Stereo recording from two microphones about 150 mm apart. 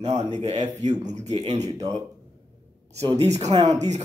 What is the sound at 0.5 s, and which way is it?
Speech, 50° right (ahead or behind).